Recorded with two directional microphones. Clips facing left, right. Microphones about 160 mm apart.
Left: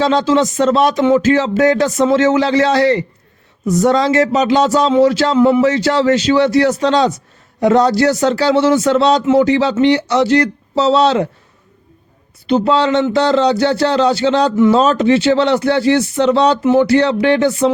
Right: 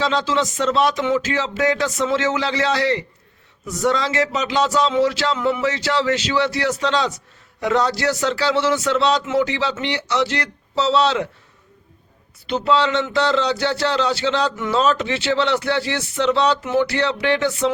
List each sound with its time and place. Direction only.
0.0 s a man's voice: 50° left (ahead or behind)
12.5 s a man's voice: 40° left (ahead or behind)